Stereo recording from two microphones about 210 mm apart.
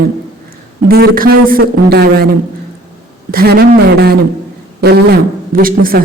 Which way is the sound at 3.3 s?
45° right (ahead or behind).